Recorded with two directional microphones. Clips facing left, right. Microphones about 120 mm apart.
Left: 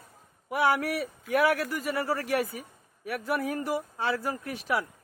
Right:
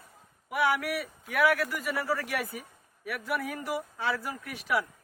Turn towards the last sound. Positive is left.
turn(degrees=30)  # may be behind; listen again after turning